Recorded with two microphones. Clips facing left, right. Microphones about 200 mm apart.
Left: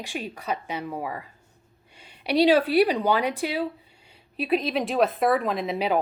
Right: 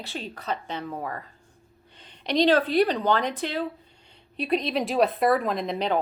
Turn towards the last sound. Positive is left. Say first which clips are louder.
# left 1 dB
turn(degrees=5)  # may be behind; listen again after turning